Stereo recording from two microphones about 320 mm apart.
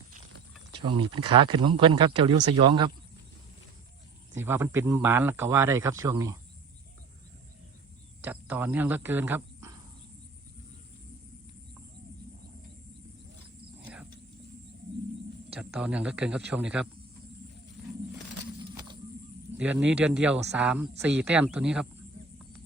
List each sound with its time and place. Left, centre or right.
0.8 s speech: centre
4.4 s speech: centre
8.2 s speech: centre
15.5 s a man's voice: centre
19.5 s a man's voice: centre